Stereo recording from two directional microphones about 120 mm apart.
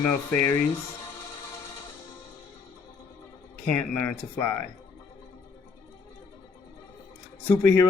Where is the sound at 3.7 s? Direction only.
10° left (ahead or behind).